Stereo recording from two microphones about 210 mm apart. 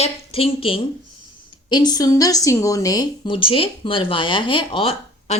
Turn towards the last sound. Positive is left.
turn(degrees=25)  # may be behind; listen again after turning